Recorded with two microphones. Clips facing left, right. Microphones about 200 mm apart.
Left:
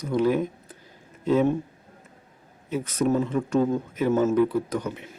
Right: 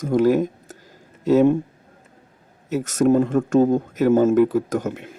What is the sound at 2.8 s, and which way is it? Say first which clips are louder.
Speech: right 7 dB; 45° right (ahead or behind).